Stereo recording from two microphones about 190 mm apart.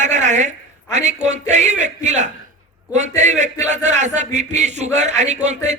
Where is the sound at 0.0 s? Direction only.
40° right (ahead or behind).